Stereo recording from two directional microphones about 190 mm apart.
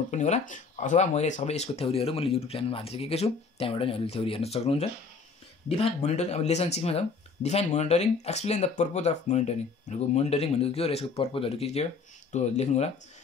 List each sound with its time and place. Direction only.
0.1 s speech: 40° left (ahead or behind)